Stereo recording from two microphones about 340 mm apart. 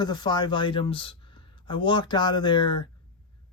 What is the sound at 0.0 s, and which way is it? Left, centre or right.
Speech, centre.